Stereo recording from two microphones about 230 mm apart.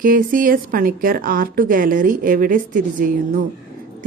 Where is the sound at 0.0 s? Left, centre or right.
Right.